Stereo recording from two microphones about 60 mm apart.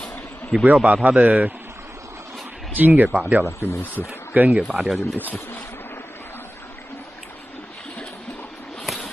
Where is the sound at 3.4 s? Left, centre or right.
Left.